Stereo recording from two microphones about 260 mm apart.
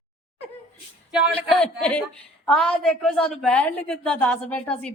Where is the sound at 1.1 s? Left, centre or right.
Centre.